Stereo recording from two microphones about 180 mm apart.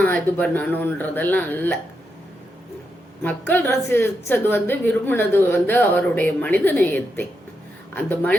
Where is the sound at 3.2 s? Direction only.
10° left (ahead or behind).